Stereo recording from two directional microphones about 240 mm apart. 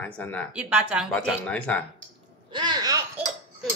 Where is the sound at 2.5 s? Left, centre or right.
Centre.